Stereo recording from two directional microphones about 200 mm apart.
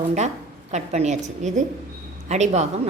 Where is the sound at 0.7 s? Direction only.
35° right (ahead or behind).